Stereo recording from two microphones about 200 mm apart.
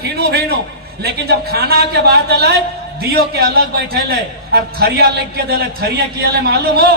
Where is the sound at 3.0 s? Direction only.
50° right (ahead or behind).